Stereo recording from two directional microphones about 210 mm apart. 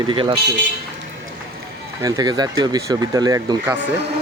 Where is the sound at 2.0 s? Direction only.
20° right (ahead or behind).